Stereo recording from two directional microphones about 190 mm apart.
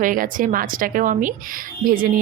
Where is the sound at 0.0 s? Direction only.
45° right (ahead or behind).